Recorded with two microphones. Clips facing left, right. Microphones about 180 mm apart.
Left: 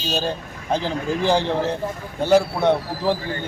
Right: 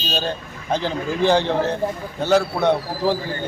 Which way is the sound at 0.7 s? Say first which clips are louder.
Even; 5° left (ahead or behind).